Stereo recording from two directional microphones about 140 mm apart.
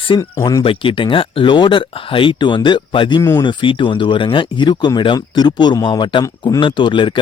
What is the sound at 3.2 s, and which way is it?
Speech, 25° left (ahead or behind).